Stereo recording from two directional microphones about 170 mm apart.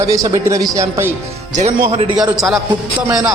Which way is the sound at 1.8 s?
35° right (ahead or behind).